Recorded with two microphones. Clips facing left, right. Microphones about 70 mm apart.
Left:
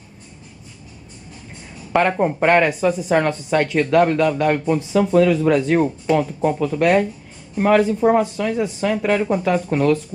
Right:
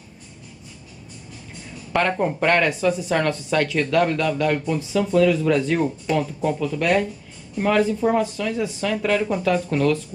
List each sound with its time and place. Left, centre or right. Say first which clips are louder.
1.9 s speech: left 4 dB; centre